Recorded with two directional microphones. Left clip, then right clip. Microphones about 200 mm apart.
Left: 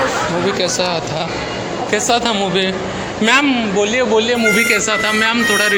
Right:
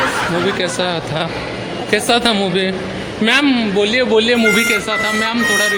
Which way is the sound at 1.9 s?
35° right (ahead or behind).